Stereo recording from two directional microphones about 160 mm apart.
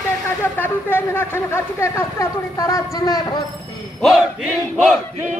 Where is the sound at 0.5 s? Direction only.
15° left (ahead or behind).